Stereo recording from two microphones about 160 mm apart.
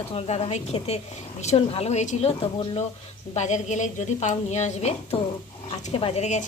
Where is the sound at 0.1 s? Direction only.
40° left (ahead or behind).